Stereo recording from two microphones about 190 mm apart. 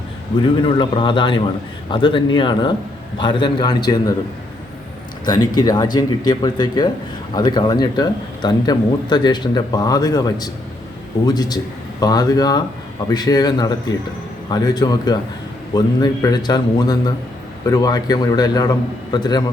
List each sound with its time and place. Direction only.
0.3 s speech: 25° left (ahead or behind)
5.2 s speech: 20° left (ahead or behind)